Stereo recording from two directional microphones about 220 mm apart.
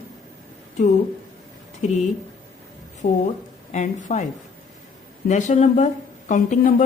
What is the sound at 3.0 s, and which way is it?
Speech, 25° left (ahead or behind).